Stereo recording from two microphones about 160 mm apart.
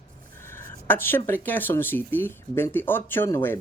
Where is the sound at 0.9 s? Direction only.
15° left (ahead or behind).